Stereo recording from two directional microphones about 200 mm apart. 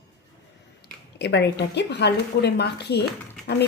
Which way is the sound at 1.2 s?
60° left (ahead or behind).